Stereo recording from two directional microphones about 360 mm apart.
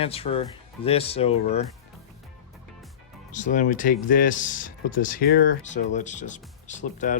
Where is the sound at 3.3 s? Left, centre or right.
Left.